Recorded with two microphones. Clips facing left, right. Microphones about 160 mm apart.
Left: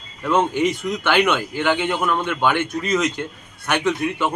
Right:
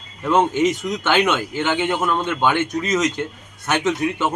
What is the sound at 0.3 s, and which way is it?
A man's voice, 20° right (ahead or behind).